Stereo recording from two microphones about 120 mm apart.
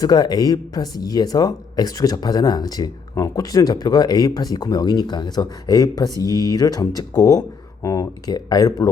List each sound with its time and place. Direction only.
0.0 s speech: 35° left (ahead or behind)